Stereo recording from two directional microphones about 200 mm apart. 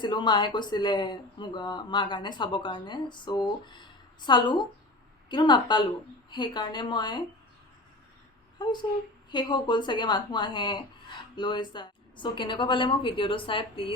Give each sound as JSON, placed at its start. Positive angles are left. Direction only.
{"t": 0.0, "sound": "speech", "side_deg": 20}
{"t": 8.5, "sound": "speech", "side_deg": 20}